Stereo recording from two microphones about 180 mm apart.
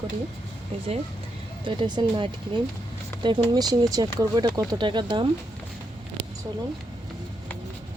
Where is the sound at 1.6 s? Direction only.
25° right (ahead or behind).